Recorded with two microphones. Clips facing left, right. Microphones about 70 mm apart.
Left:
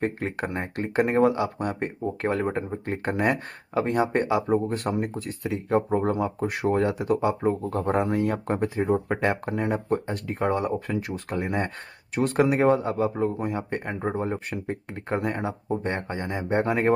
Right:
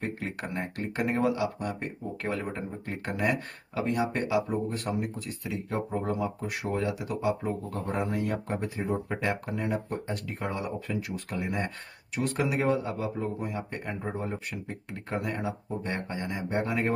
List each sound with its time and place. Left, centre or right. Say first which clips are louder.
0.0 s speech: left 6 dB; left